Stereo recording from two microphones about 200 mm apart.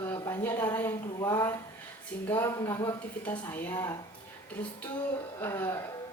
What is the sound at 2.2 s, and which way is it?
A woman's voice, 10° left (ahead or behind).